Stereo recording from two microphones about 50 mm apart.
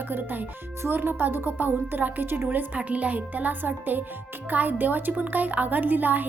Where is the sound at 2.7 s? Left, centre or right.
Right.